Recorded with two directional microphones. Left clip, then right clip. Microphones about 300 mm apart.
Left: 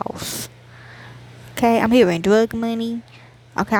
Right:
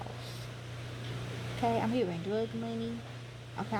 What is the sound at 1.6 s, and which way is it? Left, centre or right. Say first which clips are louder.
Speech: left 16 dB; left.